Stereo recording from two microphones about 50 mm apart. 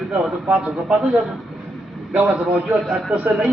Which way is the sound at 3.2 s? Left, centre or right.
Right.